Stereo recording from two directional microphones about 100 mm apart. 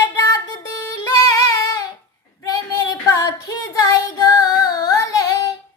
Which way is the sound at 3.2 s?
35° left (ahead or behind).